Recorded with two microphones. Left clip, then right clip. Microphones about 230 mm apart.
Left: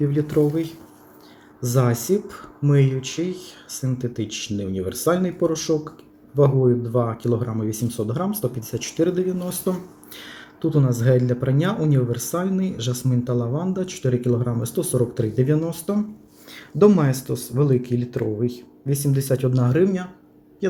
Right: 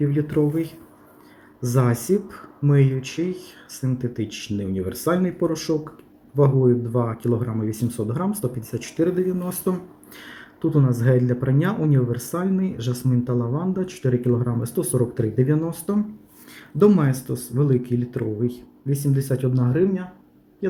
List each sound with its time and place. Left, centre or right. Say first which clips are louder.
0.0 s speech: left 2 dB; centre